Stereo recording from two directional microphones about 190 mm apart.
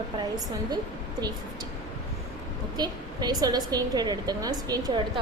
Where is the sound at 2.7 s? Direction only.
20° right (ahead or behind).